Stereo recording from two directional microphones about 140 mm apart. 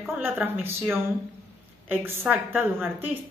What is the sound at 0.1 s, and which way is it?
A woman's voice, 15° right (ahead or behind).